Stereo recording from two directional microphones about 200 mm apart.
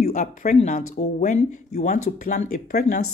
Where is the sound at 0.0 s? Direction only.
35° left (ahead or behind).